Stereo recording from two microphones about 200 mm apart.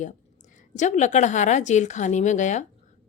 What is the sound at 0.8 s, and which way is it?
A woman's voice, 35° left (ahead or behind).